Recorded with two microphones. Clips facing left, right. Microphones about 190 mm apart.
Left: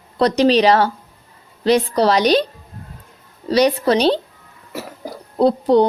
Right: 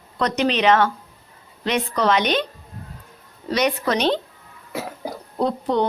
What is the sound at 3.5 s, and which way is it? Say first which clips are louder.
Speech: left 6 dB; 35° left (ahead or behind).